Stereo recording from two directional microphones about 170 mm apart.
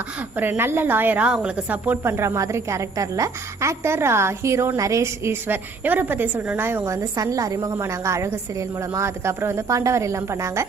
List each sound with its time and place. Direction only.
0.3 s a woman's voice: 10° right (ahead or behind)